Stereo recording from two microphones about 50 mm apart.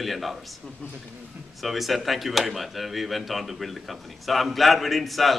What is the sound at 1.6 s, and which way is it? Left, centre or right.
Speech, centre.